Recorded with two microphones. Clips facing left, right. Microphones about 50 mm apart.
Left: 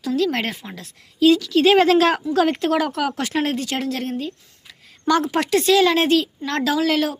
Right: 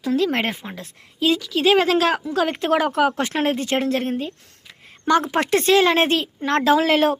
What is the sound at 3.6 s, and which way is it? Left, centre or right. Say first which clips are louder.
A woman's voice: right 3 dB; right.